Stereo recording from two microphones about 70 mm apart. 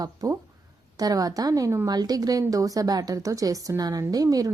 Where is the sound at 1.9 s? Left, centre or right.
Right.